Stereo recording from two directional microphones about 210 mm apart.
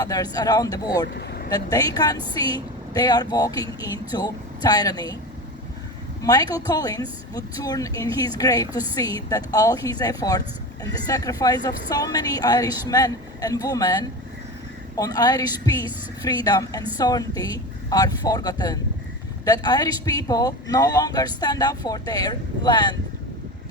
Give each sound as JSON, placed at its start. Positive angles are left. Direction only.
{"t": 0.0, "sound": "a woman's voice", "side_deg": 15}
{"t": 1.1, "sound": "vehicle", "side_deg": 50}
{"t": 1.5, "sound": "a man's voice", "side_deg": 20}
{"t": 6.2, "sound": "a woman's voice", "side_deg": 20}